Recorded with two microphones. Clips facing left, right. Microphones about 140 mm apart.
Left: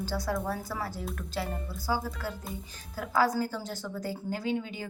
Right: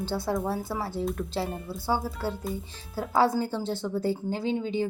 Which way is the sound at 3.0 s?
25° right (ahead or behind).